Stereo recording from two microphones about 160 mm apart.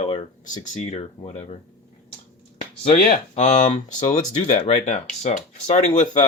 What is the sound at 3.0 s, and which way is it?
Speech, 50° left (ahead or behind).